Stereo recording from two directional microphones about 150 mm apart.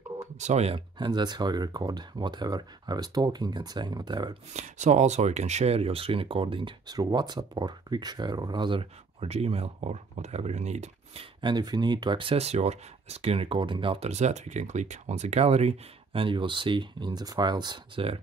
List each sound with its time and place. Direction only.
0.4 s speech: 50° right (ahead or behind)
0.9 s speech: 30° right (ahead or behind)
4.6 s speech: 50° right (ahead or behind)
11.4 s speech: 30° right (ahead or behind)